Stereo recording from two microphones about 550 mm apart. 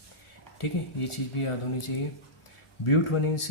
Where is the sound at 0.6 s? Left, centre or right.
Left.